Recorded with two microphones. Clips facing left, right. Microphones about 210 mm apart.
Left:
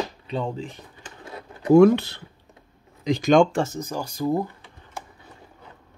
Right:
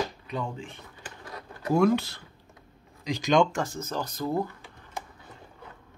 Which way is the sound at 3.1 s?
55° left (ahead or behind).